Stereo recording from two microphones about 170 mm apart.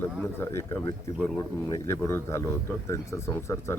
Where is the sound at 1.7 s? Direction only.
15° left (ahead or behind).